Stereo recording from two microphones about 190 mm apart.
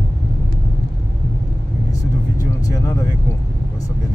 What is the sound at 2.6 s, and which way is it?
Speech, 15° left (ahead or behind).